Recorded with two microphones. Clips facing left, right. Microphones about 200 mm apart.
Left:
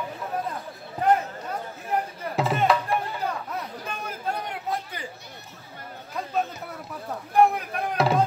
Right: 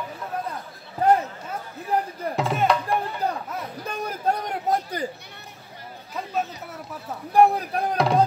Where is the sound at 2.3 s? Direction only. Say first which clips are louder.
Even; centre (ahead or behind).